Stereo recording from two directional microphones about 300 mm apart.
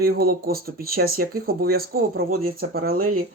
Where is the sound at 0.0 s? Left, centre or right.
Right.